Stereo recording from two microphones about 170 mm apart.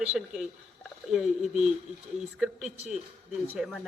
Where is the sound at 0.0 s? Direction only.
5° right (ahead or behind).